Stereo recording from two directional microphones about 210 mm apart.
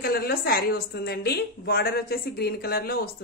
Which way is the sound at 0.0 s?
45° left (ahead or behind).